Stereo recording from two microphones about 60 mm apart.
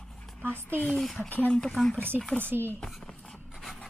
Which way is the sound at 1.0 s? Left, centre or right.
Centre.